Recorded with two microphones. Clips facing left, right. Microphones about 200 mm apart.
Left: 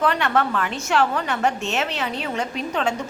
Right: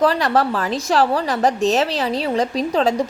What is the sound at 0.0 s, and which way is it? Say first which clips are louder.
A woman's voice: right 4 dB; 35° right (ahead or behind).